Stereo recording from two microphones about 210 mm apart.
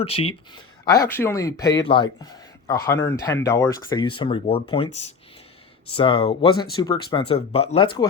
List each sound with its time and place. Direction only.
0.0 s speech: 25° left (ahead or behind)
0.9 s speech: 15° left (ahead or behind)